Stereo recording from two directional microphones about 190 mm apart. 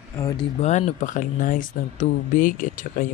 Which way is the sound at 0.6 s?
35° left (ahead or behind).